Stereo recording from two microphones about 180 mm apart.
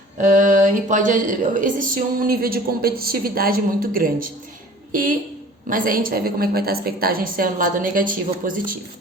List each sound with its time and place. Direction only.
0.2 s a woman's voice: 45° right (ahead or behind)